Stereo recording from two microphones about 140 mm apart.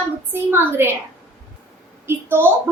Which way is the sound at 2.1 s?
15° right (ahead or behind).